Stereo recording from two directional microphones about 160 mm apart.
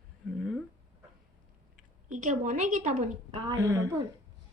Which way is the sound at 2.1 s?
50° right (ahead or behind).